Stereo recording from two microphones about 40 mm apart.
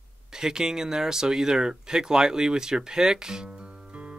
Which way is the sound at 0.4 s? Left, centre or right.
Centre.